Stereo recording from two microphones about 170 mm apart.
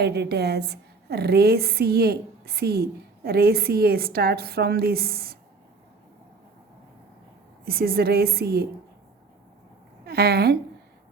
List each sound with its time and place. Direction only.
0.0 s a woman's voice: 75° right (ahead or behind)
7.6 s a woman's voice: 65° right (ahead or behind)
10.1 s a woman's voice: 65° right (ahead or behind)